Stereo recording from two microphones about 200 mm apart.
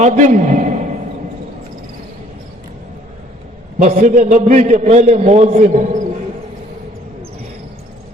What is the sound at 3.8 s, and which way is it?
A man's voice, 35° right (ahead or behind).